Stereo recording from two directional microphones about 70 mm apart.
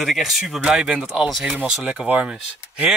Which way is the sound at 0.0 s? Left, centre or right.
Centre.